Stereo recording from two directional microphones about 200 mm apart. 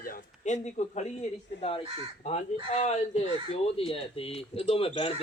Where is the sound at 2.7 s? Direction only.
35° left (ahead or behind).